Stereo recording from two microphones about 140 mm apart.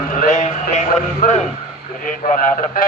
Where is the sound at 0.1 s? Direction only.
65° left (ahead or behind).